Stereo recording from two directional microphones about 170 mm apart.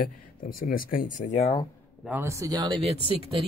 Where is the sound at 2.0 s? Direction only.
15° right (ahead or behind).